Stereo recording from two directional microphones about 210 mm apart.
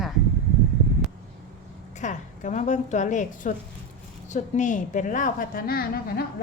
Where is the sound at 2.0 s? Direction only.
35° left (ahead or behind).